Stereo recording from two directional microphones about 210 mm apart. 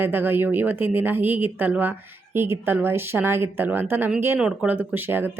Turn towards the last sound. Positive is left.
turn(degrees=-10)  # may be behind; listen again after turning